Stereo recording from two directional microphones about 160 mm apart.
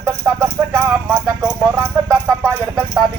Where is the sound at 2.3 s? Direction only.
20° right (ahead or behind).